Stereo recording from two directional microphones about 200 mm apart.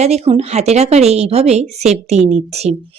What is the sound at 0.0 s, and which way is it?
A woman's voice, 30° right (ahead or behind).